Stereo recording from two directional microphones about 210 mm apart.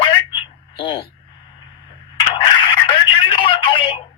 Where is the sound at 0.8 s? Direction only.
25° left (ahead or behind).